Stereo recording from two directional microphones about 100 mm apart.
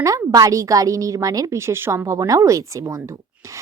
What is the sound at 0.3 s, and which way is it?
A woman's voice, 35° right (ahead or behind).